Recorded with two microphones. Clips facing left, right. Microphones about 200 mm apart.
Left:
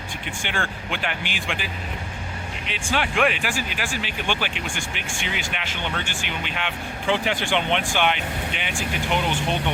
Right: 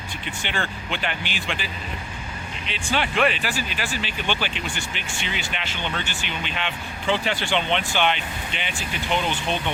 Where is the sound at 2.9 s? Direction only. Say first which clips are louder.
Even; 10° left (ahead or behind).